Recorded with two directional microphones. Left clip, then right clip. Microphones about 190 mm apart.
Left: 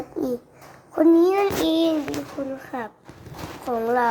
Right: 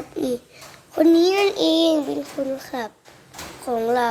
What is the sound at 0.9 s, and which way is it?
A child's voice, 20° right (ahead or behind).